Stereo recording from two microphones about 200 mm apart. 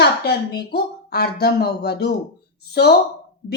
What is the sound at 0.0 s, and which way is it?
Speech, 55° left (ahead or behind).